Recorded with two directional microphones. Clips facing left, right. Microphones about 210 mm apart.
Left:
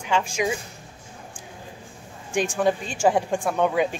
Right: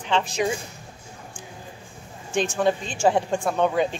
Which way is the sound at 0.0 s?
10° left (ahead or behind).